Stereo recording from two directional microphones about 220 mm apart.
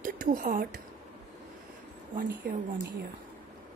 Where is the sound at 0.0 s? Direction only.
40° right (ahead or behind).